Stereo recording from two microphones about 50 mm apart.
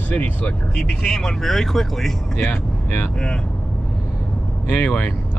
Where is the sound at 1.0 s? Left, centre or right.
Centre.